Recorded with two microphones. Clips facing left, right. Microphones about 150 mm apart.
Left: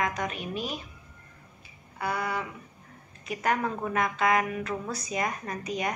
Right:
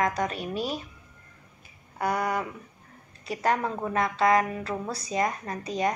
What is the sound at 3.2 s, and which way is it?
A woman's voice, 35° right (ahead or behind).